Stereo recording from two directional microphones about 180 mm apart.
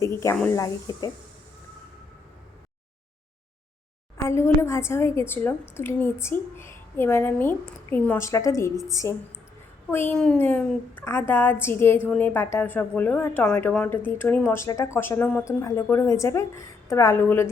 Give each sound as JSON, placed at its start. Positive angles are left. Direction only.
{"t": 0.0, "sound": "a woman's voice", "side_deg": 15}
{"t": 0.9, "sound": "speech", "side_deg": 20}
{"t": 4.2, "sound": "a woman's voice", "side_deg": 15}